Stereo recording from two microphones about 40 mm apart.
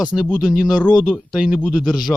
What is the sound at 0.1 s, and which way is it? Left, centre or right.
Speech, left.